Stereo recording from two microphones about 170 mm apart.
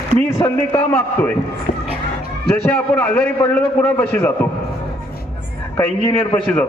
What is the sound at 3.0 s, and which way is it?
A man's voice, 15° left (ahead or behind).